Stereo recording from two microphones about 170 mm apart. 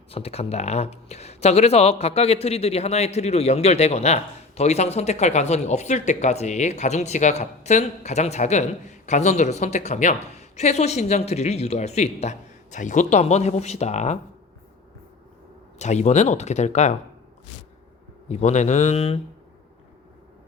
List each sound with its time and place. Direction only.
0.1 s speech: 35° left (ahead or behind)
15.8 s speech: 45° left (ahead or behind)
18.3 s speech: 40° left (ahead or behind)